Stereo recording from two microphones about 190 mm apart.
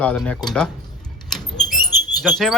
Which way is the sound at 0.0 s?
5° left (ahead or behind).